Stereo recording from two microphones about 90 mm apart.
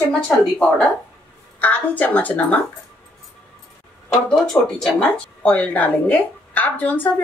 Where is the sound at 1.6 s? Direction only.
15° left (ahead or behind).